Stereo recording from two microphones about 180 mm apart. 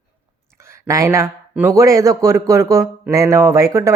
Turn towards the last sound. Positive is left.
turn(degrees=-15)  # may be behind; listen again after turning